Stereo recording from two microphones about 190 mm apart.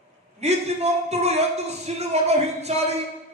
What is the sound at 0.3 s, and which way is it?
Speech, 35° right (ahead or behind).